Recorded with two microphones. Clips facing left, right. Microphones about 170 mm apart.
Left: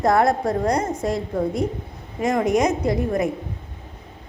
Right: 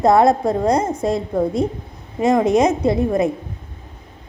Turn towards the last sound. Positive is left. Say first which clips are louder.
# right 4 dB
turn(degrees=-25)  # may be behind; listen again after turning